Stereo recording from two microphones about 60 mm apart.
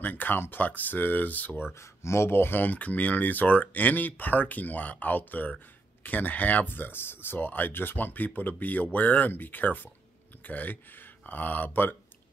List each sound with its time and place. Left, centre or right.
0.0 s speech: left
1.7 s speech: left